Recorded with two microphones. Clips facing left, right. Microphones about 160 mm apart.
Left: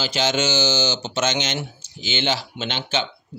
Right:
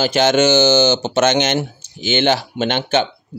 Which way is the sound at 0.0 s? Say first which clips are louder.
Right 8 dB; 55° right (ahead or behind).